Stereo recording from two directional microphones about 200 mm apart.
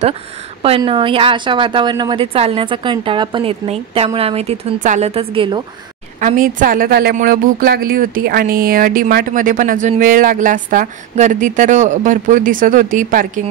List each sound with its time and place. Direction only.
0.6 s a woman's voice: 25° right (ahead or behind)
6.1 s a woman's voice: 40° right (ahead or behind)